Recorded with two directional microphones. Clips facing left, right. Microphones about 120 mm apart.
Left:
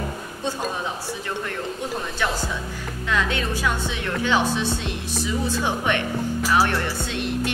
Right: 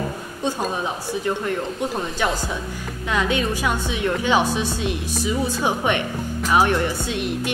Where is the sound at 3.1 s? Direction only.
15° right (ahead or behind).